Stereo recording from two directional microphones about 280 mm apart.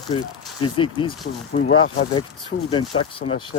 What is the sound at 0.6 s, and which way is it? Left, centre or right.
Speech, centre.